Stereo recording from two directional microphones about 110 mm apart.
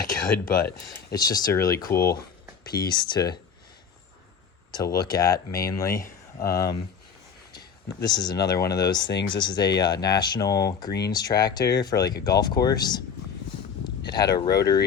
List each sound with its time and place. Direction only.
1.1 s speech: 35° left (ahead or behind)
2.7 s speech: 40° left (ahead or behind)
4.7 s speech: 40° left (ahead or behind)
8.0 s speech: 40° left (ahead or behind)
14.0 s speech: 40° left (ahead or behind)